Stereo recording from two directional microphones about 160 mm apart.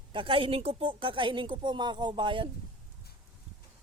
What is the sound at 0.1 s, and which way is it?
A woman's voice, 35° right (ahead or behind).